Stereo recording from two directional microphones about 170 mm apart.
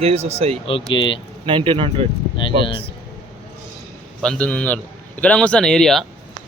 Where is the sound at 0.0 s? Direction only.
40° right (ahead or behind).